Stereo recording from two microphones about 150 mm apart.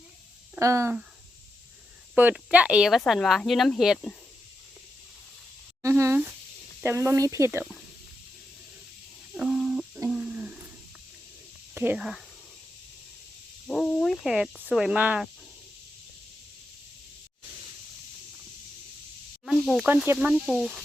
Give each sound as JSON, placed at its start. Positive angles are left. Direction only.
{"t": 0.6, "sound": "speech", "side_deg": -20}
{"t": 2.1, "sound": "speech", "side_deg": -10}
{"t": 5.8, "sound": "speech", "side_deg": -20}
{"t": 9.3, "sound": "a sound", "side_deg": -5}
{"t": 11.7, "sound": "a sound", "side_deg": -15}
{"t": 11.9, "sound": "speech", "side_deg": 0}
{"t": 13.7, "sound": "cricket", "side_deg": 5}
{"t": 14.7, "sound": "speech", "side_deg": -5}
{"t": 19.5, "sound": "snake", "side_deg": 0}
{"t": 20.1, "sound": "speech", "side_deg": -5}